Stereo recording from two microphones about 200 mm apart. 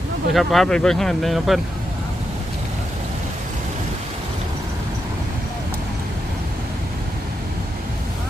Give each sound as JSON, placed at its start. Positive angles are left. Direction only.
{"t": 0.3, "sound": "speech", "side_deg": 0}